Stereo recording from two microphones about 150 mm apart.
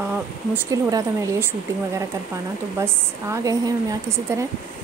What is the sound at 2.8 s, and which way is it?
A woman's voice, 20° right (ahead or behind).